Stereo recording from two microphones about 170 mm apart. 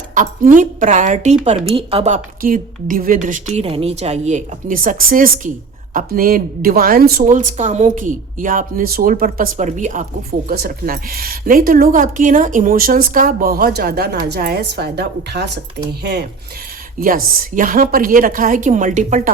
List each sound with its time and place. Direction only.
0.1 s a woman's voice: 50° right (ahead or behind)
7.2 s a woman's voice: 45° right (ahead or behind)
10.5 s a woman's voice: 60° right (ahead or behind)
17.0 s a woman's voice: 55° right (ahead or behind)